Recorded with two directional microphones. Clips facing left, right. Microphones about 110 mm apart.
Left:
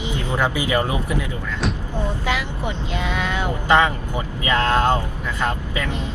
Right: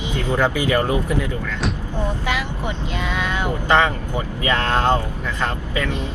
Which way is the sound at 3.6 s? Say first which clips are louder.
Left 1 dB; 15° left (ahead or behind).